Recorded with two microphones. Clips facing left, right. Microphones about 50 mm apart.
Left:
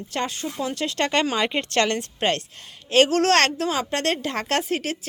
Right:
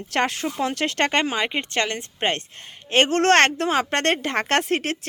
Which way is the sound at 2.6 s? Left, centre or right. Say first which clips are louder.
Left 2 dB; right.